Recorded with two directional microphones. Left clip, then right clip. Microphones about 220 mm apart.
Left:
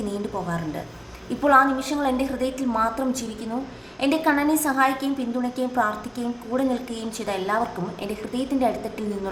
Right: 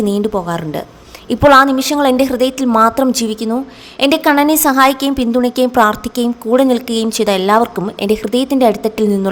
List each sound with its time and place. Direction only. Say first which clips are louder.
0.1 s a woman's voice: right 12 dB; 45° right (ahead or behind)